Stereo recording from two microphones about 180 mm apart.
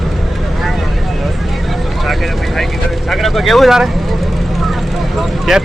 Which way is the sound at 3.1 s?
Centre (ahead or behind).